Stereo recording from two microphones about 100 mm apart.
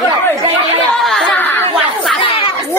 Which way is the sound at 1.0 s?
Centre (ahead or behind).